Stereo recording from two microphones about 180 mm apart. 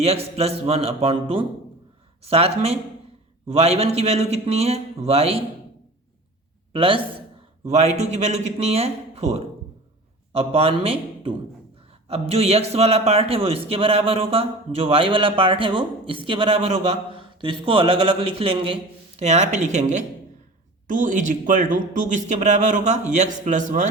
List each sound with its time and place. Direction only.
0.0 s a man's voice: 35° right (ahead or behind)
6.7 s a man's voice: 30° right (ahead or behind)